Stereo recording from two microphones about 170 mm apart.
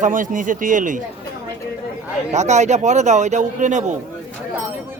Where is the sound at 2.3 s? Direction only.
45° right (ahead or behind).